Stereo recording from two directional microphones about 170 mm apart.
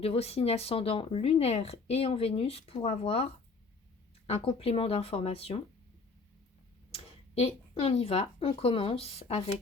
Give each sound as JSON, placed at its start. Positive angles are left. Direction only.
{"t": 0.0, "sound": "speech", "side_deg": 35}
{"t": 4.3, "sound": "speech", "side_deg": 35}
{"t": 6.9, "sound": "speech", "side_deg": 35}